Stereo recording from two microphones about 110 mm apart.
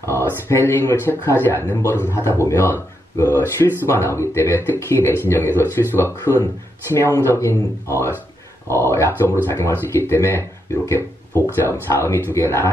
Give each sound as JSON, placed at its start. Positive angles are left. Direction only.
{"t": 0.0, "sound": "speech", "side_deg": 25}